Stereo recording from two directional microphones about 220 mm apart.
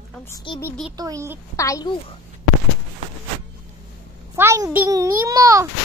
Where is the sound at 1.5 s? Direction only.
15° left (ahead or behind).